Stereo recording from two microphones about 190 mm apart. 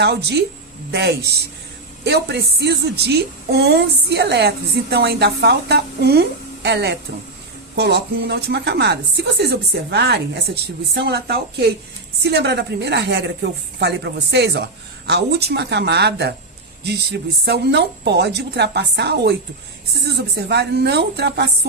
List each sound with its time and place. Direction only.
0.0 s a woman's voice: 60° right (ahead or behind)